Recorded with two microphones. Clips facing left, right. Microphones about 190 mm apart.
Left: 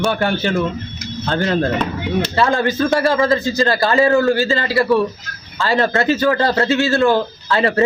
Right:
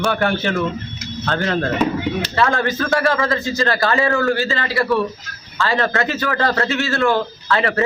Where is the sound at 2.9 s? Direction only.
30° left (ahead or behind).